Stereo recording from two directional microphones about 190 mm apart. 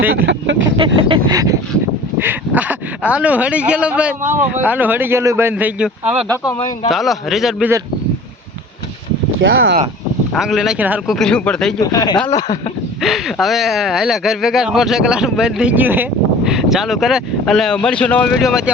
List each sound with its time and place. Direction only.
0.1 s speech: 65° right (ahead or behind)
0.9 s a sound: 30° right (ahead or behind)
2.1 s speech: 10° right (ahead or behind)
9.4 s speech: 90° right
10.3 s speech: centre (ahead or behind)
11.8 s speech: 20° left (ahead or behind)
13.0 s speech: centre (ahead or behind)